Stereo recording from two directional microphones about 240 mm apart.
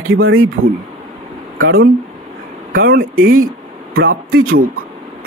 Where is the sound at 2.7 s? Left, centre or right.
Right.